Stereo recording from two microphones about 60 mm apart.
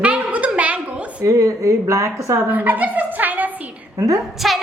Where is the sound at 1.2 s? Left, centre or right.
Right.